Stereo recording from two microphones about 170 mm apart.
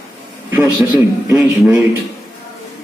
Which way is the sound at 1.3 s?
5° right (ahead or behind).